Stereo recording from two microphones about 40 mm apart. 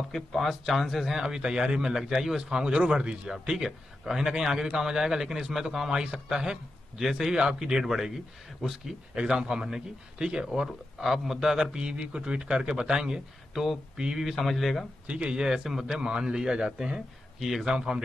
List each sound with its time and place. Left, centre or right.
0.1 s speech: centre
1.2 s a man's voice: centre
5.9 s a man's voice: centre
9.1 s a man's voice: right
13.5 s speech: centre
15.0 s speech: right
15.3 s a man's voice: centre
17.4 s speech: centre
17.6 s a man's voice: centre